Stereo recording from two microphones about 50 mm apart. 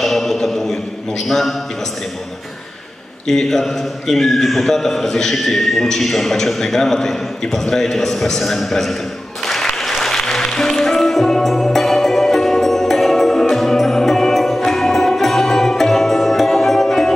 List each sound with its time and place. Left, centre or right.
0.0 s a sound: centre
1.2 s a man's voice: centre
3.3 s a man's voice: centre
9.5 s music: centre